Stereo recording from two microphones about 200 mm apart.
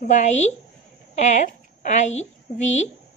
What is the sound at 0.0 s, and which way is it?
A woman's voice, 35° left (ahead or behind).